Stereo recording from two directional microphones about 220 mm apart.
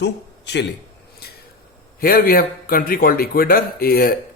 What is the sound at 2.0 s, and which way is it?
A man's voice, 45° left (ahead or behind).